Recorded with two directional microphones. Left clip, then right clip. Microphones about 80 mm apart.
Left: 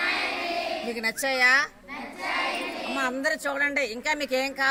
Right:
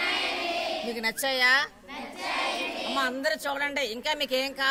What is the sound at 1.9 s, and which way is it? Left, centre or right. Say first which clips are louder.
Child singing: left 2 dB; centre.